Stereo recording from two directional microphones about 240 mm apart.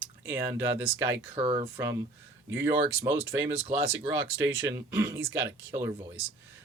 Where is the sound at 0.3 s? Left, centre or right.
Centre.